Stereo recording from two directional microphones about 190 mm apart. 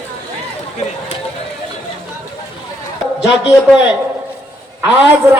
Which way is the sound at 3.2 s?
5° right (ahead or behind).